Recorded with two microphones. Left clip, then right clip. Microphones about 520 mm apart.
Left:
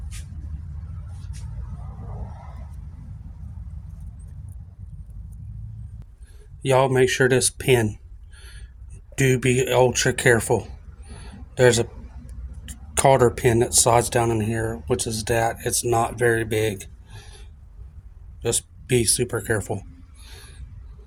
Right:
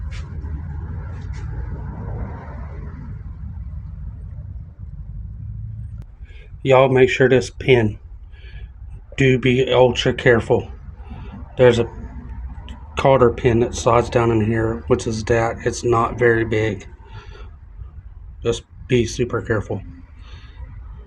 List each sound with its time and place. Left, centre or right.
6.6 s speech: left
9.1 s speech: left
12.6 s speech: left
18.4 s speech: left